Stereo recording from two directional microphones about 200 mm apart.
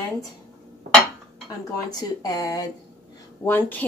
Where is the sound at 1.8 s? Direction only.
20° left (ahead or behind).